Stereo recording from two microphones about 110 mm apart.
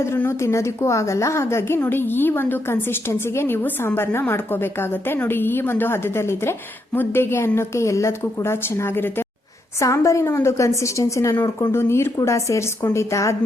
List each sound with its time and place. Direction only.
0.0 s a woman's voice: 25° left (ahead or behind)